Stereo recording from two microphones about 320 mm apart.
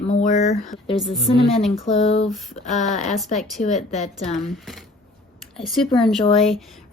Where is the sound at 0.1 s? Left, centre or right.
Left.